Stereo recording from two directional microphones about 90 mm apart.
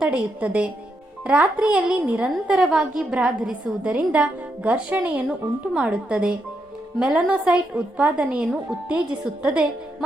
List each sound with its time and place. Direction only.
0.0 s a woman's voice: 15° right (ahead or behind)